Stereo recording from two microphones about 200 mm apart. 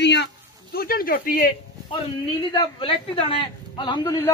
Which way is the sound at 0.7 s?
50° left (ahead or behind).